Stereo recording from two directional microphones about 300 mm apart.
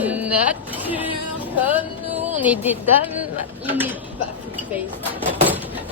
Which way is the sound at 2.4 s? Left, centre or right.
Centre.